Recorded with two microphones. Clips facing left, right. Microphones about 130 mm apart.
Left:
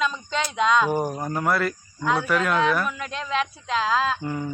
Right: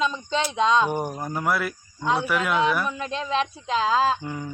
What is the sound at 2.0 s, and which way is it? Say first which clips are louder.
Speech: even; 30° right (ahead or behind).